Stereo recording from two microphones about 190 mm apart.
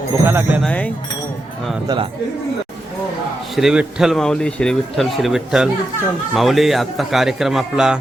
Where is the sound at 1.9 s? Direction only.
20° right (ahead or behind).